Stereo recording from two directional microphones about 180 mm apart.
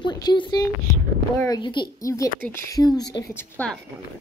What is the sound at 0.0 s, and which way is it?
A woman's voice, 25° left (ahead or behind).